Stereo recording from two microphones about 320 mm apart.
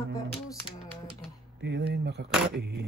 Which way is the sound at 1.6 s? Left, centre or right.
Right.